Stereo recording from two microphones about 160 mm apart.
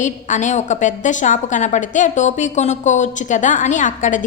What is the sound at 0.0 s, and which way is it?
A woman's voice, 50° left (ahead or behind).